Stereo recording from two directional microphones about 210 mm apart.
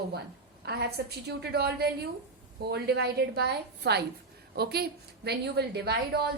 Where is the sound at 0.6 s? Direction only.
50° right (ahead or behind).